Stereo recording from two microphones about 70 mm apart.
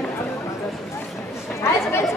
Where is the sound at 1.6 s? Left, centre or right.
Left.